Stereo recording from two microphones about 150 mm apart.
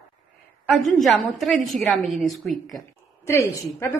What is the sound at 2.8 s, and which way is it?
Speech, 20° left (ahead or behind).